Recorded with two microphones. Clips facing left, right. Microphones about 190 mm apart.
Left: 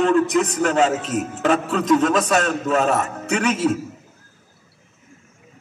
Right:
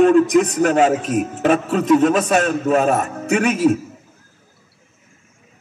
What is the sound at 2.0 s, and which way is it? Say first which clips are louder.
A man's voice: right 3 dB; 40° right (ahead or behind).